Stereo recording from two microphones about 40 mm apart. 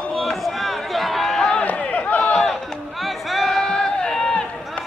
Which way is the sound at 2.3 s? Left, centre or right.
Centre.